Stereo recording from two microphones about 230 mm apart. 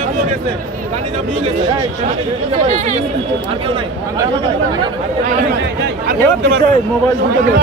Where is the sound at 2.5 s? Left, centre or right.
Right.